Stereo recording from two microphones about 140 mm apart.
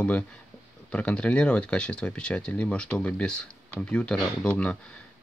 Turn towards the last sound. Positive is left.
turn(degrees=10)  # may be behind; listen again after turning